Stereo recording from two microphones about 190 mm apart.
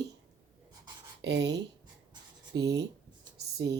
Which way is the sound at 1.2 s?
65° right (ahead or behind).